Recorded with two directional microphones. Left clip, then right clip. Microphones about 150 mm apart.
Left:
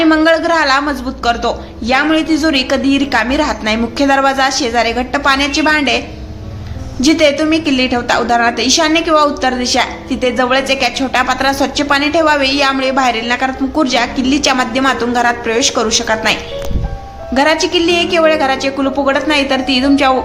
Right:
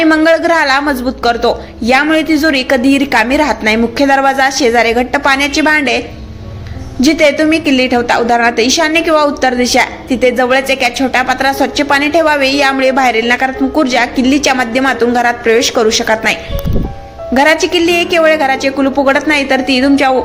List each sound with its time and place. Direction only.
0.0 s a woman's voice: 30° right (ahead or behind)
7.0 s a woman's voice: 25° right (ahead or behind)